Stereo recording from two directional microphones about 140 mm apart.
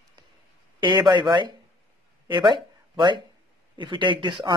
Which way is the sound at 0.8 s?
35° right (ahead or behind).